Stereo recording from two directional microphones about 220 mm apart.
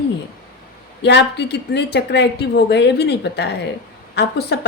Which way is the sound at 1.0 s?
50° left (ahead or behind).